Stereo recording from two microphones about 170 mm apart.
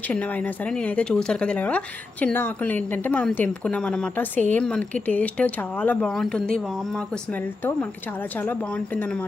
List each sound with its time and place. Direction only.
0.1 s speech: 10° left (ahead or behind)